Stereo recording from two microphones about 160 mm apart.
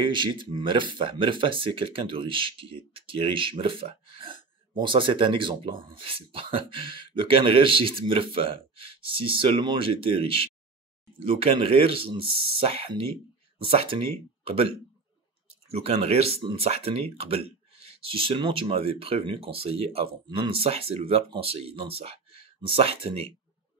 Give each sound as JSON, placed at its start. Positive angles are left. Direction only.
{"t": 0.0, "sound": "speech", "side_deg": -30}
{"t": 15.7, "sound": "speech", "side_deg": -40}